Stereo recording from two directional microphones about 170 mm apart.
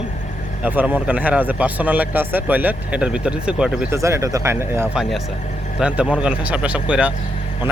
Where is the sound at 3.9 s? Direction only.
15° right (ahead or behind).